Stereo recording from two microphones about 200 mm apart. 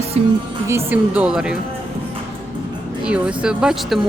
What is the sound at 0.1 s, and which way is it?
Speech, 30° right (ahead or behind).